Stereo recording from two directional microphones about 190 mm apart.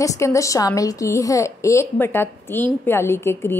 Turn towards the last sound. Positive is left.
turn(degrees=10)  # may be behind; listen again after turning